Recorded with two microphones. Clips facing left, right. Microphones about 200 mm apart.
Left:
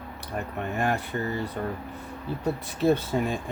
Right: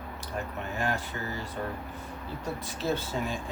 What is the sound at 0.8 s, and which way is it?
Speech, 60° left (ahead or behind).